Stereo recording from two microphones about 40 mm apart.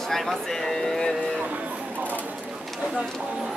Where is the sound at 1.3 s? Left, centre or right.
Right.